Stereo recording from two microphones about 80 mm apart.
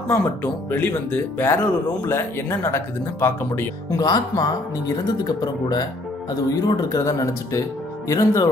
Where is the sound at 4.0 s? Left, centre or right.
Left.